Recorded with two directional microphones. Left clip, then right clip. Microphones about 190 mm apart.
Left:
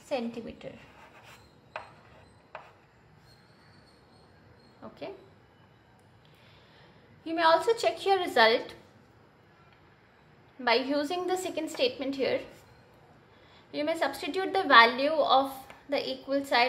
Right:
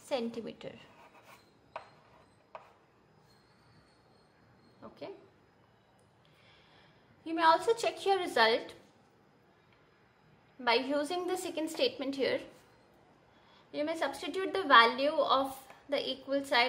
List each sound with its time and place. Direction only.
0.1 s a woman's voice: 30° right (ahead or behind)
4.8 s speech: 5° right (ahead or behind)
7.2 s a woman's voice: 10° right (ahead or behind)
10.6 s a woman's voice: 10° right (ahead or behind)
13.7 s a woman's voice: 5° right (ahead or behind)